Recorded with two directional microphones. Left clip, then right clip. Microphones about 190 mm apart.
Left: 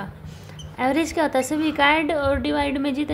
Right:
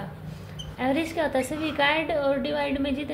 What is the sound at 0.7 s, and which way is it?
A woman's voice, 45° left (ahead or behind).